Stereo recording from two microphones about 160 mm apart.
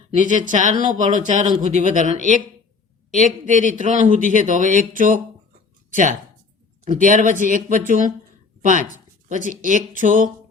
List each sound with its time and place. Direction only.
0.2 s a man's voice: 50° right (ahead or behind)
6.8 s a man's voice: 55° right (ahead or behind)